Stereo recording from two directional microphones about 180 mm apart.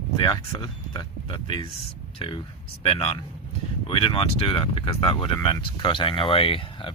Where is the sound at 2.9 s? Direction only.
30° left (ahead or behind).